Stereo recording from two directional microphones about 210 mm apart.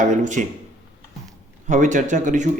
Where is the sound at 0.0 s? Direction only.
35° right (ahead or behind).